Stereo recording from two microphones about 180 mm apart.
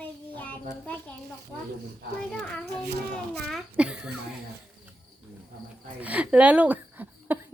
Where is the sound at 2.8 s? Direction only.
60° right (ahead or behind).